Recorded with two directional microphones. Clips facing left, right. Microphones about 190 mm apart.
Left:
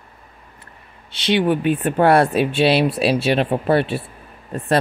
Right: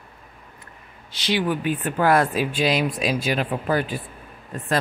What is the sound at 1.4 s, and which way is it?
Speech, 25° left (ahead or behind).